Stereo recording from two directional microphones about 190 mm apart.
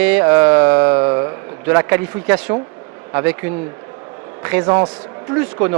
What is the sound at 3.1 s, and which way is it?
A man's voice, 10° right (ahead or behind).